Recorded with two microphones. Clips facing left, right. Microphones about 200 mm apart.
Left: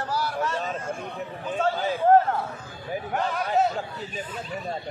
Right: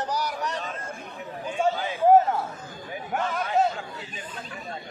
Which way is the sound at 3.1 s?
Centre (ahead or behind).